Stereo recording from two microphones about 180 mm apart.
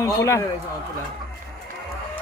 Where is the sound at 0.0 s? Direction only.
15° left (ahead or behind).